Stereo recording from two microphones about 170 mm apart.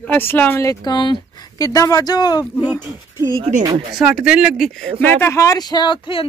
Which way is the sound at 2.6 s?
15° right (ahead or behind).